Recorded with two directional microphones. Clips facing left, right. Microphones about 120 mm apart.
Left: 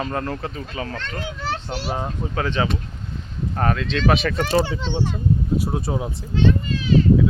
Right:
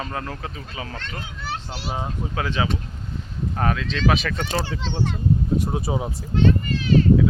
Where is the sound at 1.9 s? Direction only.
10° right (ahead or behind).